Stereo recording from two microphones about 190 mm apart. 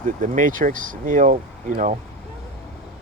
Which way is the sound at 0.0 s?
45° right (ahead or behind).